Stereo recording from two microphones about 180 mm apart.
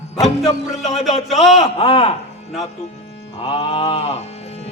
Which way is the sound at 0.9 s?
Centre (ahead or behind).